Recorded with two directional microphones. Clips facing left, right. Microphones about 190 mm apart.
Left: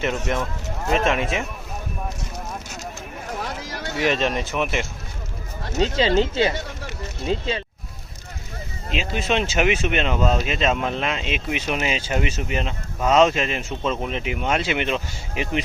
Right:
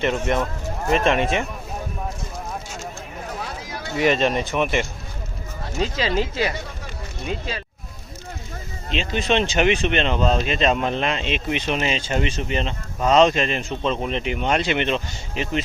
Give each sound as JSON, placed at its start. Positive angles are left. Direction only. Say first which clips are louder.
{"t": 0.9, "sound": "speech", "louder": "right 2 dB", "side_deg": 0}
{"t": 3.9, "sound": "speech", "louder": "right 3 dB", "side_deg": 0}
{"t": 5.7, "sound": "speech", "louder": "left 4 dB", "side_deg": 25}
{"t": 8.9, "sound": "speech", "louder": "right 2 dB", "side_deg": 5}